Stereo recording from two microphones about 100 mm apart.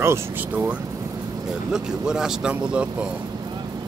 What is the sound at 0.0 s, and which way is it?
Speech, 25° right (ahead or behind).